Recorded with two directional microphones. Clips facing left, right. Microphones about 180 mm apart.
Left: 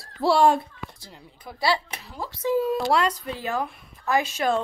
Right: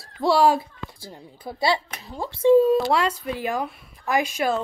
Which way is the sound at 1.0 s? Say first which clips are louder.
Right 6 dB; 30° right (ahead or behind).